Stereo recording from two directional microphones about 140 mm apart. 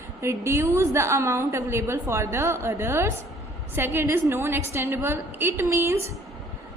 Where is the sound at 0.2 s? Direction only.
20° right (ahead or behind).